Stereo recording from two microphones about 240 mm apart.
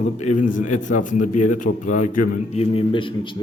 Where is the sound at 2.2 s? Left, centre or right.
Left.